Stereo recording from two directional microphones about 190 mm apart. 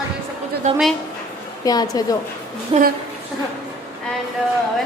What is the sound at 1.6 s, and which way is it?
Speech, 20° left (ahead or behind).